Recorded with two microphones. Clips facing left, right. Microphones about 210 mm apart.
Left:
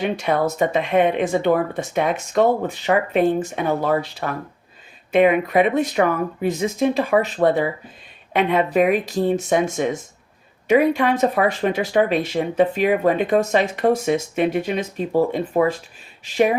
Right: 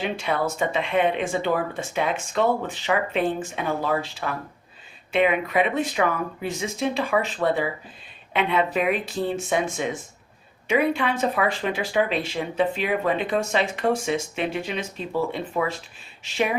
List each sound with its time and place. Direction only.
0.2 s speech: 45° left (ahead or behind)